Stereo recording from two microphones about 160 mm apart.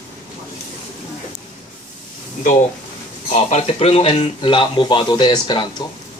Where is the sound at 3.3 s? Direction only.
40° left (ahead or behind).